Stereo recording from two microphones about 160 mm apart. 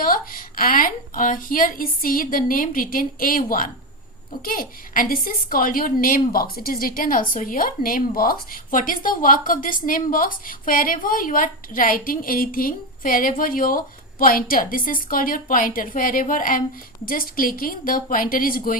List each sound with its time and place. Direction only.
0.0 s a woman's voice: 60° left (ahead or behind)